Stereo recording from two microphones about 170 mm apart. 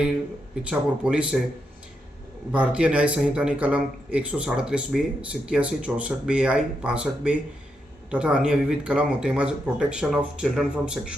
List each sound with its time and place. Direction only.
0.7 s speech: 5° right (ahead or behind)
2.5 s speech: 5° right (ahead or behind)